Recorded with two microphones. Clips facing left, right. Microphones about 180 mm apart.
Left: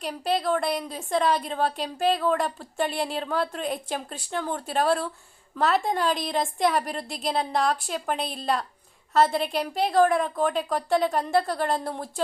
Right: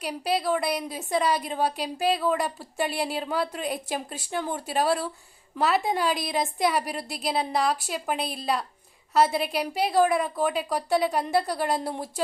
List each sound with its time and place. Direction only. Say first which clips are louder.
0.0 s a woman's voice: left 1 dB; 5° right (ahead or behind)
11.8 s speech: right 1 dB; 20° right (ahead or behind)